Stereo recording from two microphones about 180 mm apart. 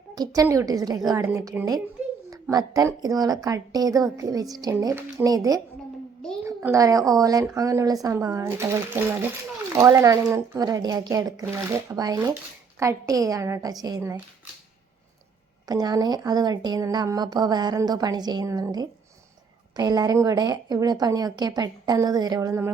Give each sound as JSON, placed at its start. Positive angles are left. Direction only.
{"t": 0.2, "sound": "a woman's voice", "side_deg": -20}
{"t": 15.6, "sound": "a woman's voice", "side_deg": -20}